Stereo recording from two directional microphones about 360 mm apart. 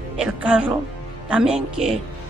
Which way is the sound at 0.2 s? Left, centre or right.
Centre.